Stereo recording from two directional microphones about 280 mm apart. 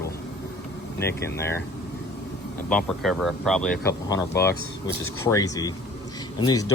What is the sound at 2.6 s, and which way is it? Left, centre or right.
Speech, centre.